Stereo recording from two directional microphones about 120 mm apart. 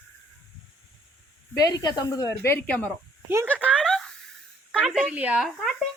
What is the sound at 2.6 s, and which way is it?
Speech, 10° left (ahead or behind).